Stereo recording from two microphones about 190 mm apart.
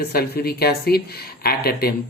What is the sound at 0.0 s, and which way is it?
Speech, 55° left (ahead or behind).